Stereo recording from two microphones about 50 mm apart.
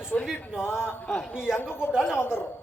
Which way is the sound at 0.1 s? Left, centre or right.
Left.